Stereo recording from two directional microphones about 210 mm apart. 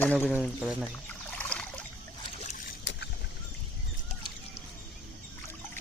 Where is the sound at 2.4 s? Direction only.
40° left (ahead or behind).